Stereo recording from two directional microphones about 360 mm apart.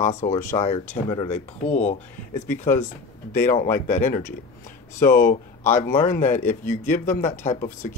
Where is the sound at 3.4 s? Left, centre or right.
Left.